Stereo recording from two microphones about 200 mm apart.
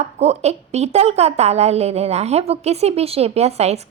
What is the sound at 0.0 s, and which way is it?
A woman's voice, 30° right (ahead or behind).